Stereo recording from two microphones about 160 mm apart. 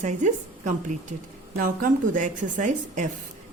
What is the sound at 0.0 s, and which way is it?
Speech, 50° right (ahead or behind).